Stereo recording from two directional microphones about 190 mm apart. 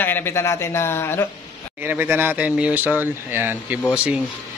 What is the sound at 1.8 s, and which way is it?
A man's voice, 10° right (ahead or behind).